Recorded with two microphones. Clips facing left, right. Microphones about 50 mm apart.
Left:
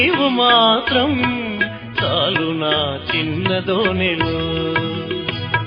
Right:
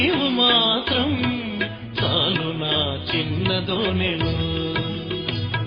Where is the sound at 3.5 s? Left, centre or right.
Left.